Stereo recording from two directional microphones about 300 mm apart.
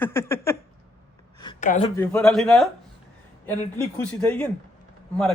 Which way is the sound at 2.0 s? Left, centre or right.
Centre.